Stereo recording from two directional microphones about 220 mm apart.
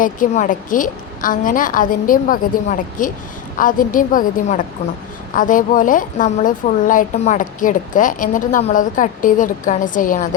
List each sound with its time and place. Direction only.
0.0 s a woman's voice: 35° left (ahead or behind)